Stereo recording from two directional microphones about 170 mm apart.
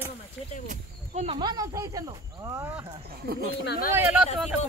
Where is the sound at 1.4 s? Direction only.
25° right (ahead or behind).